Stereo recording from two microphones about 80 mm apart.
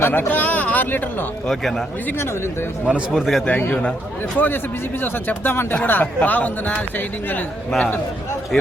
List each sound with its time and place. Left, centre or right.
0.0 s speech: left
1.5 s speech: centre
2.0 s speech: left
2.8 s speech: centre
4.4 s speech: left